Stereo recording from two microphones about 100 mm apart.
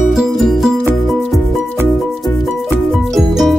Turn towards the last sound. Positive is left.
turn(degrees=0)  # may be behind; listen again after turning